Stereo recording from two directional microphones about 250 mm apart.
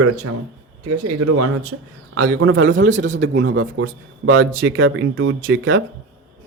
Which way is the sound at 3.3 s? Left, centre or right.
Right.